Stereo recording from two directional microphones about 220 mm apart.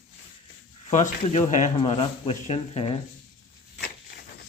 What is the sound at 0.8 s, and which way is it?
Speech, 30° left (ahead or behind).